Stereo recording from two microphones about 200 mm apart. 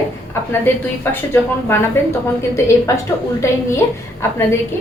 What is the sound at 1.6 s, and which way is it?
A woman's voice, 15° left (ahead or behind).